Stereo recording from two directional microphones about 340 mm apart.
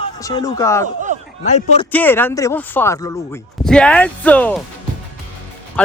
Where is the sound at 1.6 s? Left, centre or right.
Centre.